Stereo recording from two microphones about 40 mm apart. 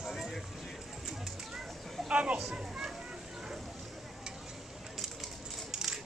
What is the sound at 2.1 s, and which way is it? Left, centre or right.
Speech, right.